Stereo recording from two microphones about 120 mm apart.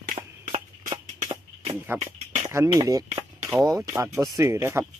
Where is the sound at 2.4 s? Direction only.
25° right (ahead or behind).